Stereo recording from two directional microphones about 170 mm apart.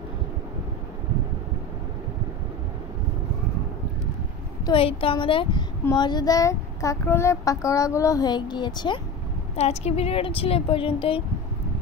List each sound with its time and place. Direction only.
4.6 s a child's voice: 30° left (ahead or behind)
9.6 s a woman's voice: 40° left (ahead or behind)